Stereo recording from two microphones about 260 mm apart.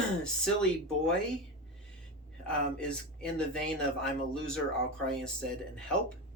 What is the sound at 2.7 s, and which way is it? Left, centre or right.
Speech, centre.